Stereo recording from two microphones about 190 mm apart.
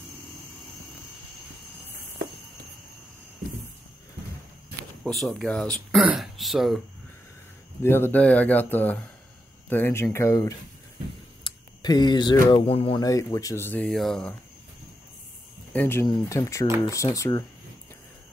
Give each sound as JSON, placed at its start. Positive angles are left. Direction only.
{"t": 5.0, "sound": "speech", "side_deg": 5}
{"t": 7.8, "sound": "speech", "side_deg": 10}
{"t": 13.0, "sound": "speech", "side_deg": 15}
{"t": 15.7, "sound": "speech", "side_deg": 10}